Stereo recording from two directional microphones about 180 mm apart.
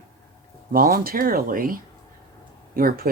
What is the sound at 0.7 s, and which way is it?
Speech, 55° right (ahead or behind).